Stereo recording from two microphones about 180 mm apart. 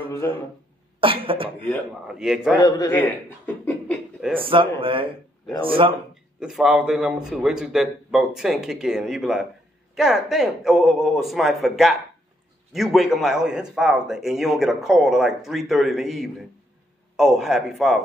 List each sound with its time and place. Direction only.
0.2 s speech: 15° left (ahead or behind)
1.0 s speech: 30° right (ahead or behind)
2.0 s a man's voice: 5° right (ahead or behind)
2.6 s a man's voice: 20° left (ahead or behind)
3.6 s beatboxing: 5° left (ahead or behind)
4.4 s speech: 30° right (ahead or behind)
6.4 s a man's voice: centre (ahead or behind)